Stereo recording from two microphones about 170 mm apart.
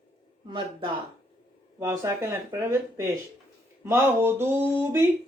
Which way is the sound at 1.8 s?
15° right (ahead or behind).